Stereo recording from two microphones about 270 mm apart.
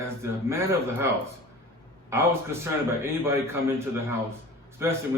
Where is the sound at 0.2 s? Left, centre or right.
Centre.